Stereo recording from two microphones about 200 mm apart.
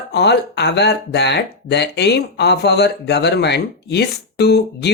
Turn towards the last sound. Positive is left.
turn(degrees=55)  # may be behind; listen again after turning